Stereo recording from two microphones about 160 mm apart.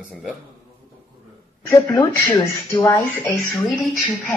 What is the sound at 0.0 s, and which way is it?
Speech, 5° right (ahead or behind).